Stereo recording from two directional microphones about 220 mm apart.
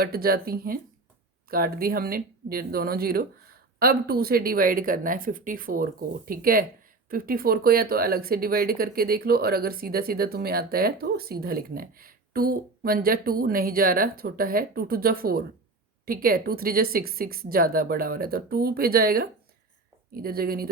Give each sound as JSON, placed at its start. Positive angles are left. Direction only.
{"t": 0.0, "sound": "speech", "side_deg": -45}